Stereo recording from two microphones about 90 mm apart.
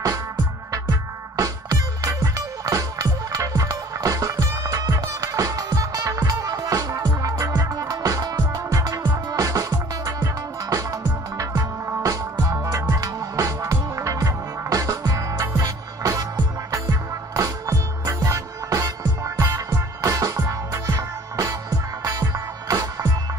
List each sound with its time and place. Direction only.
0.7 s music: 40° right (ahead or behind)
17.4 s music: 35° right (ahead or behind)
20.8 s music: 45° right (ahead or behind)